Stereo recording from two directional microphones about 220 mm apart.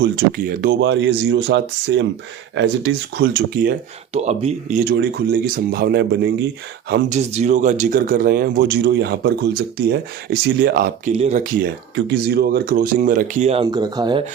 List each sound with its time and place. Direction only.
0.0 s speech: 40° right (ahead or behind)
4.1 s speech: 30° right (ahead or behind)
4.9 s speech: 45° right (ahead or behind)
7.1 s speech: 30° right (ahead or behind)
11.1 s speech: 30° right (ahead or behind)